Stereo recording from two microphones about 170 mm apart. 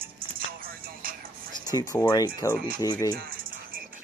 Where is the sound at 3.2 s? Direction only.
55° right (ahead or behind).